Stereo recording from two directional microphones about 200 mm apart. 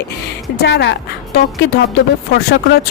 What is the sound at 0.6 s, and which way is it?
Speech, 60° left (ahead or behind).